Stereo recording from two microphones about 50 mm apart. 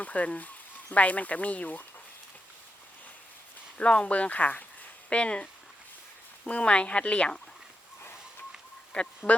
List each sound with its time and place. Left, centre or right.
0.0 s speech: left
3.8 s speech: left
6.5 s speech: left
8.9 s a sound: left